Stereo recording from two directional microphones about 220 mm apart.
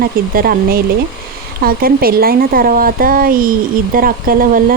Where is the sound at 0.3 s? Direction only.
40° right (ahead or behind).